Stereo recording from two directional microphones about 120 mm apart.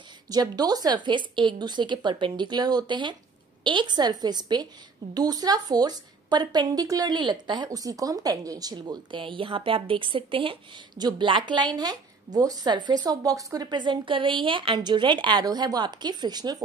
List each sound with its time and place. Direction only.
0.3 s a woman's voice: 35° right (ahead or behind)